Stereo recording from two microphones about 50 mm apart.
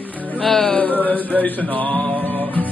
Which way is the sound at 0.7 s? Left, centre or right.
Left.